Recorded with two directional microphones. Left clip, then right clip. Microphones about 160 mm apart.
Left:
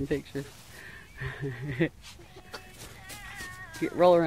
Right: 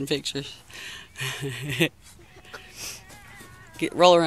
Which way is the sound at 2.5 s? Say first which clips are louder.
Right 2 dB; 25° right (ahead or behind).